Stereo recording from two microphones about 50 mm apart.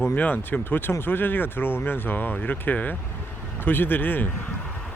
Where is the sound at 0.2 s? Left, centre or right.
Left.